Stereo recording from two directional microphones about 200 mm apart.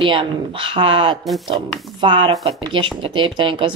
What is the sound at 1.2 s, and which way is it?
Speech, centre (ahead or behind).